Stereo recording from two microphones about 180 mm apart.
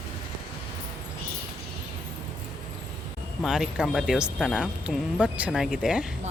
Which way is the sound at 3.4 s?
Centre (ahead or behind).